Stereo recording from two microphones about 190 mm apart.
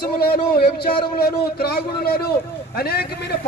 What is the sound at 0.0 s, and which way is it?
A man's voice, 55° left (ahead or behind).